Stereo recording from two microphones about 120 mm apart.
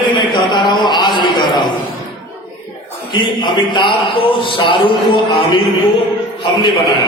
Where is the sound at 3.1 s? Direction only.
40° left (ahead or behind).